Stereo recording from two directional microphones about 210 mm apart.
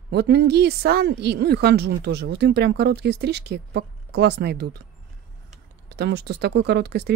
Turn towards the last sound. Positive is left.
turn(degrees=-50)  # may be behind; listen again after turning